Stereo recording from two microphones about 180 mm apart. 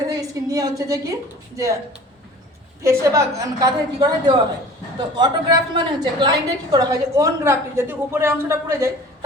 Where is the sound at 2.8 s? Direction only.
15° right (ahead or behind).